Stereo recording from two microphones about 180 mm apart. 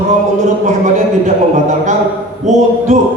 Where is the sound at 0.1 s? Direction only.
40° right (ahead or behind).